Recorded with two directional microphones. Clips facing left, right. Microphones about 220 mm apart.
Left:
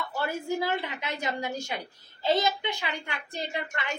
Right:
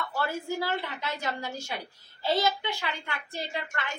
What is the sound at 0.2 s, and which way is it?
A child's voice, 15° left (ahead or behind).